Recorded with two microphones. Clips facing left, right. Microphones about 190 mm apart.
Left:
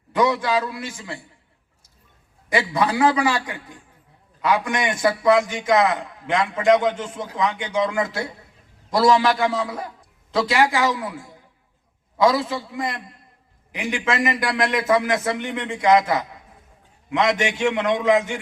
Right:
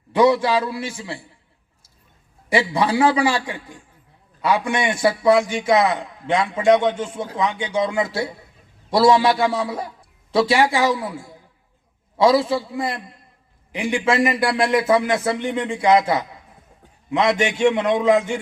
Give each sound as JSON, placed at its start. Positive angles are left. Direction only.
{"t": 0.1, "sound": "a man's voice", "side_deg": -30}
{"t": 2.5, "sound": "a man's voice", "side_deg": -30}